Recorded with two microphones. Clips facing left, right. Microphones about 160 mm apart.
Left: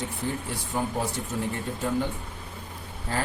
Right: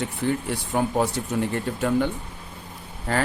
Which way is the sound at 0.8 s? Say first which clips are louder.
Right 6 dB; 75° right (ahead or behind).